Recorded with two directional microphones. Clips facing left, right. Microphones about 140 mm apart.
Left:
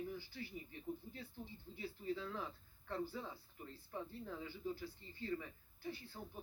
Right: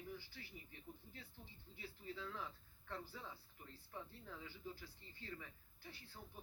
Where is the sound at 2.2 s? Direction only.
30° left (ahead or behind).